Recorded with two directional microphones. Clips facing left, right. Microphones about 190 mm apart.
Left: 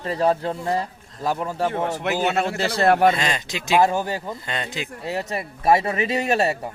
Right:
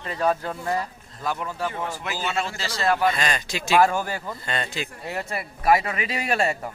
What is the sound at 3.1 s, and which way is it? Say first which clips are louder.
Speech: left 1 dB; 20° left (ahead or behind).